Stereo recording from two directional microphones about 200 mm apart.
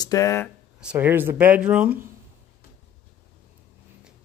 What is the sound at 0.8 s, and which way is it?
Speech, 10° right (ahead or behind).